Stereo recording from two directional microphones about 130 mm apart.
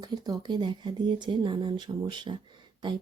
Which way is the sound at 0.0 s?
30° right (ahead or behind).